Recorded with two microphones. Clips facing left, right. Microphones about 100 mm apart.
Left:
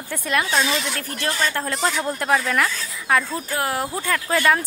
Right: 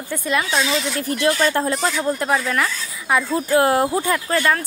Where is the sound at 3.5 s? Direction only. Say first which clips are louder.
Right 10 dB; 25° right (ahead or behind).